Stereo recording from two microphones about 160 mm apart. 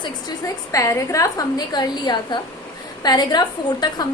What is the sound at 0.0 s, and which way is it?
A woman's voice, 20° left (ahead or behind).